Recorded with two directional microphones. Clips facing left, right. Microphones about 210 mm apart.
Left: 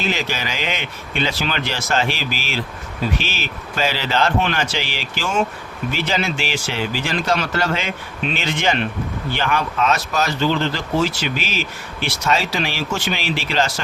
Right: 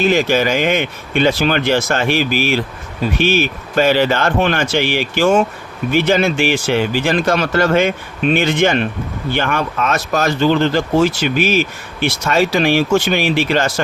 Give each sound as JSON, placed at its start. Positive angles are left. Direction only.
{"t": 0.0, "sound": "speech", "side_deg": -50}